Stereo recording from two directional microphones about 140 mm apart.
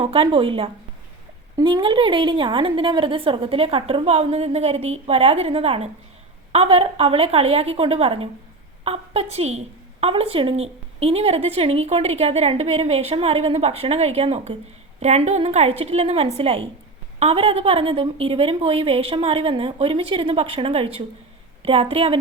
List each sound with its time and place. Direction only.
0.0 s a woman's voice: 40° right (ahead or behind)